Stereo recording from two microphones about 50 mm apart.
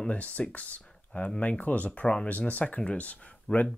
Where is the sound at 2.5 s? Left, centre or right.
Left.